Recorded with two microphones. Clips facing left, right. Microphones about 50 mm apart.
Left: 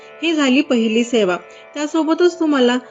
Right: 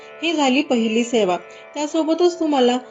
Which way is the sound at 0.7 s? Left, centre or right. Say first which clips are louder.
Left 3 dB; left.